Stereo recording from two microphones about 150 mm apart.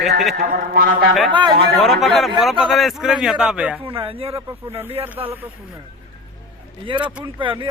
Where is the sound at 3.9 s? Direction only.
35° right (ahead or behind).